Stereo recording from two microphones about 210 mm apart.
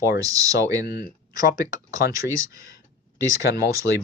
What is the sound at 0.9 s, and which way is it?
Speech, 50° left (ahead or behind).